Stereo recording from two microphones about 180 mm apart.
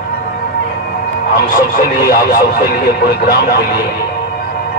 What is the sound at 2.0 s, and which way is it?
Speech, 60° left (ahead or behind).